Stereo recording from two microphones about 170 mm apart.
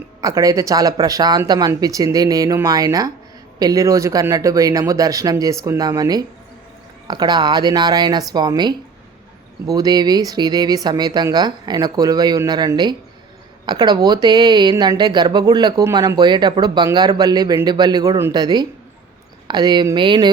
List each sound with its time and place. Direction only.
0.2 s speech: 20° right (ahead or behind)